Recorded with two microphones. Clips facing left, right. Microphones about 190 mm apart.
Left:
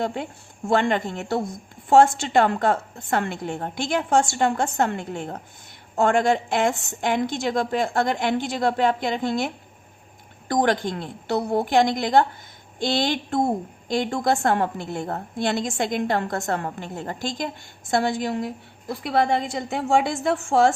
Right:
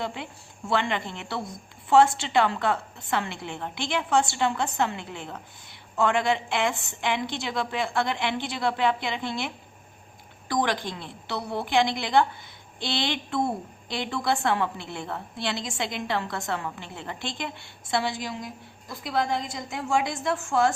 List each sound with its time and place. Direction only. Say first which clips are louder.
0.0 s a woman's voice: left 6 dB; 45° left (ahead or behind)
10.5 s a woman's voice: left 5 dB; 45° left (ahead or behind); by 20.1 s 65° left (ahead or behind)